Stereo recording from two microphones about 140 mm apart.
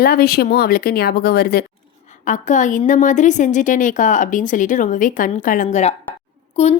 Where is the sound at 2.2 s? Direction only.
65° left (ahead or behind).